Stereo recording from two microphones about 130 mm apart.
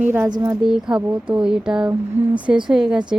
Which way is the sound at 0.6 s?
5° right (ahead or behind).